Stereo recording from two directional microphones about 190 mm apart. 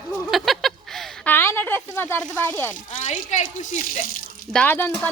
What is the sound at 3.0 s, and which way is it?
Speech, 40° left (ahead or behind).